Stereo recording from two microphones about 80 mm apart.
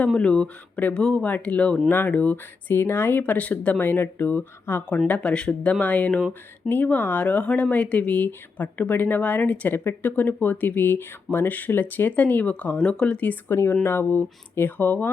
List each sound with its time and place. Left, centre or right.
0.1 s speech: centre